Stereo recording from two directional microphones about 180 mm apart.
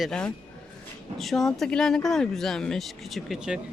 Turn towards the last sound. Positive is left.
turn(degrees=-5)  # may be behind; listen again after turning